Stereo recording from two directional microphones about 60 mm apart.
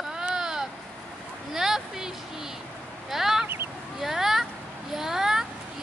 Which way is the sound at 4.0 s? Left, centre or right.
Centre.